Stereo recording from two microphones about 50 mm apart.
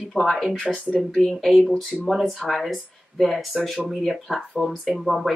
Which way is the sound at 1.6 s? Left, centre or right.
Centre.